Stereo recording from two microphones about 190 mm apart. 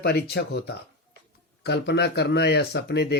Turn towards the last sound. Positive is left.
turn(degrees=60)  # may be behind; listen again after turning